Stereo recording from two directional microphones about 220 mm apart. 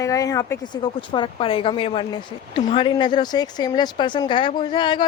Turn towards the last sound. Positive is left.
turn(degrees=20)  # may be behind; listen again after turning